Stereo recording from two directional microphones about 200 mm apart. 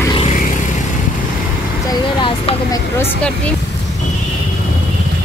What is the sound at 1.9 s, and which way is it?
Speech, 20° left (ahead or behind).